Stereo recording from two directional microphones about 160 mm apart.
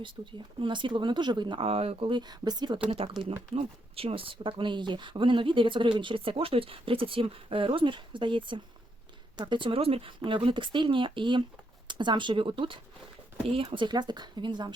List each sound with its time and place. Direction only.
0.0 s speech: 30° right (ahead or behind)